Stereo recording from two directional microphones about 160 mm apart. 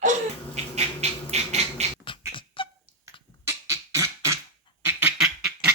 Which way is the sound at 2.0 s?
30° left (ahead or behind).